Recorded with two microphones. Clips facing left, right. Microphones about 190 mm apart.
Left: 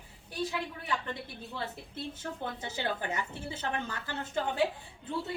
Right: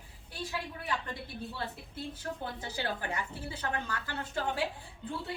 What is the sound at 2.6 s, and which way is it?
A woman's voice, 20° left (ahead or behind).